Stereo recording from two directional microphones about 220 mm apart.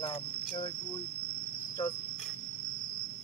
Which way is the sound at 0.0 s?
20° left (ahead or behind).